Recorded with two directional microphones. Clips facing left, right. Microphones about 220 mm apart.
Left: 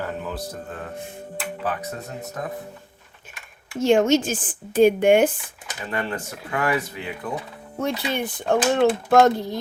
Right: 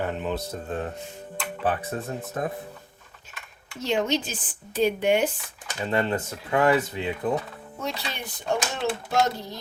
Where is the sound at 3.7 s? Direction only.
50° left (ahead or behind).